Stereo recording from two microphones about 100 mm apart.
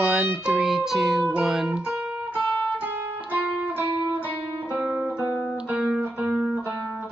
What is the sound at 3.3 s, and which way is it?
Music, 15° right (ahead or behind).